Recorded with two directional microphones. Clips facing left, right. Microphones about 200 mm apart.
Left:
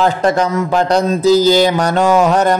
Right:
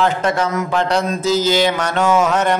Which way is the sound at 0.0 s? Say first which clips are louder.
Left 4 dB; 35° left (ahead or behind).